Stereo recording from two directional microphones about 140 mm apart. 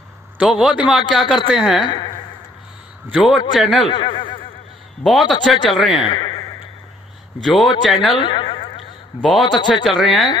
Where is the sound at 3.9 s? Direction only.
35° left (ahead or behind).